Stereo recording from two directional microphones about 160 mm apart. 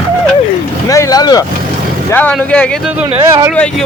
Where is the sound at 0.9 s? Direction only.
20° left (ahead or behind).